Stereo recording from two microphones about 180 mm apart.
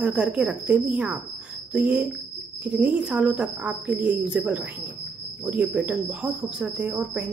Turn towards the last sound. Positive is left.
turn(degrees=-10)  # may be behind; listen again after turning